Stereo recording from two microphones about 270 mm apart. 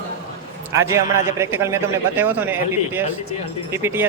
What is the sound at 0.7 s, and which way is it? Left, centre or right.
Speech, centre.